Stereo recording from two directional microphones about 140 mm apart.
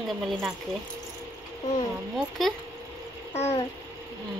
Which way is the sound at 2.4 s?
Centre (ahead or behind).